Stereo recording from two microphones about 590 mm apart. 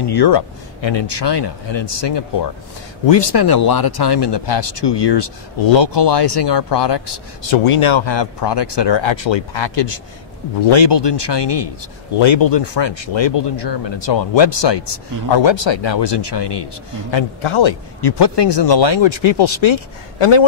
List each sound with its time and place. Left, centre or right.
0.0 s speech: left